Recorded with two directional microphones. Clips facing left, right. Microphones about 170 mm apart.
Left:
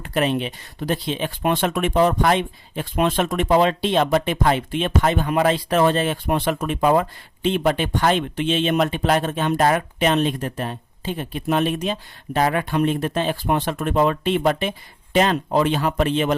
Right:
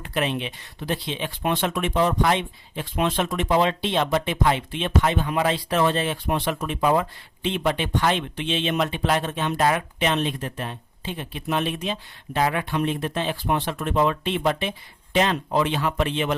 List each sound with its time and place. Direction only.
0.0 s speech: 40° left (ahead or behind)